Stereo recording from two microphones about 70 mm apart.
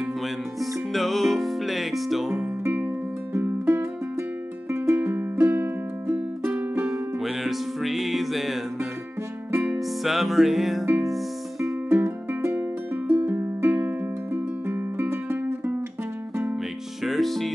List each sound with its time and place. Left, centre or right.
0.6 s music: centre
3.3 s music: right
4.7 s music: right
6.9 s music: centre
10.0 s music: centre
11.9 s music: right
17.0 s music: centre